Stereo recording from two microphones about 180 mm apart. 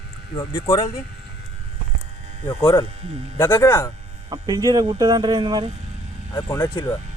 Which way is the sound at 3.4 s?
10° left (ahead or behind).